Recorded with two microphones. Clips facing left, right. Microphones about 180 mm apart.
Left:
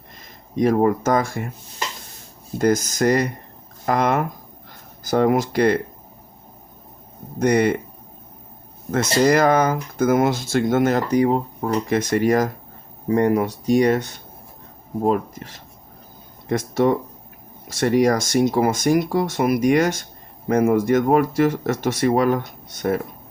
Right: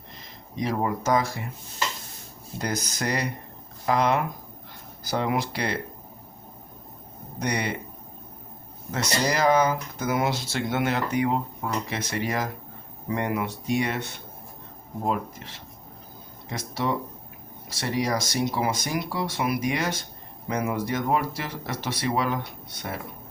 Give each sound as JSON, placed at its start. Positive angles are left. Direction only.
{"t": 0.5, "sound": "speech", "side_deg": 50}
{"t": 2.6, "sound": "speech", "side_deg": 45}
{"t": 7.3, "sound": "speech", "side_deg": 50}
{"t": 8.9, "sound": "speech", "side_deg": 50}